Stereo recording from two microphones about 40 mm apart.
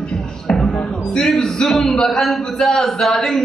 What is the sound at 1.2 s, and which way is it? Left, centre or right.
A man's voice, centre.